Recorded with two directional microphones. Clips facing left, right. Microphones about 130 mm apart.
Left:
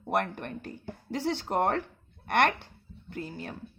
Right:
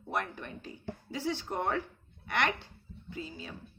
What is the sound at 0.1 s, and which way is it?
Speech, 60° left (ahead or behind).